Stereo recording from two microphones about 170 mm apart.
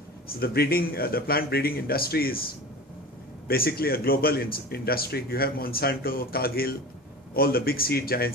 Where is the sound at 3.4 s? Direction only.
60° left (ahead or behind).